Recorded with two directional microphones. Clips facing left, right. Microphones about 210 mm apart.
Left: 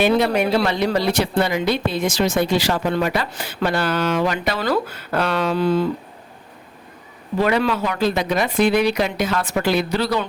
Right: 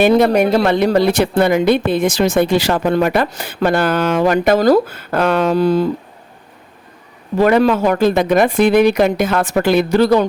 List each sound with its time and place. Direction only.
0.0 s speech: 45° right (ahead or behind)
7.3 s speech: 45° right (ahead or behind)